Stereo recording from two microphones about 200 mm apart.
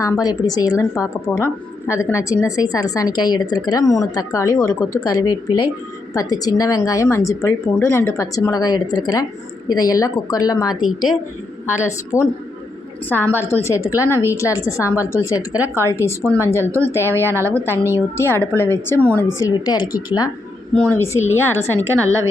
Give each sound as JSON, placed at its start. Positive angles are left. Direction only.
{"t": 0.0, "sound": "a woman's voice", "side_deg": 15}
{"t": 1.3, "sound": "a woman's voice", "side_deg": 5}
{"t": 10.8, "sound": "a woman's voice", "side_deg": 90}
{"t": 12.1, "sound": "a woman's voice", "side_deg": 15}
{"t": 14.1, "sound": "a woman's voice", "side_deg": -10}
{"t": 14.3, "sound": "a woman's voice", "side_deg": 15}
{"t": 15.5, "sound": "a woman's voice", "side_deg": -10}
{"t": 15.9, "sound": "a woman's voice", "side_deg": 15}
{"t": 17.7, "sound": "a woman's voice", "side_deg": -10}
{"t": 18.2, "sound": "a woman's voice", "side_deg": 10}